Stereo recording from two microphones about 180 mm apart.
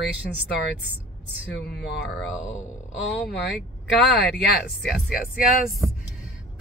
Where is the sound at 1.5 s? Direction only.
65° left (ahead or behind).